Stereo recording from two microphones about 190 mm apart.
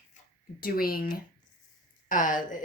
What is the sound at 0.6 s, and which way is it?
Speech, 50° left (ahead or behind).